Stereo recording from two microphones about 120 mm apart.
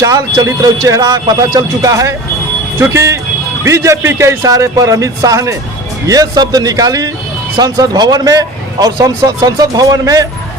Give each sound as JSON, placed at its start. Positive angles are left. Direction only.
{"t": 0.0, "sound": "speech", "side_deg": -30}